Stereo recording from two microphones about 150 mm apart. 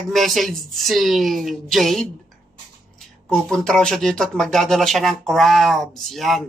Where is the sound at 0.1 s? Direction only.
Centre (ahead or behind).